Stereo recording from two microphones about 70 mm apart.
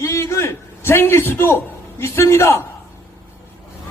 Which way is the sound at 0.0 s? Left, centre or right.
Left.